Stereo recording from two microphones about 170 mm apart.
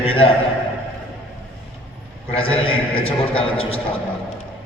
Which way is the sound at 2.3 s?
35° left (ahead or behind).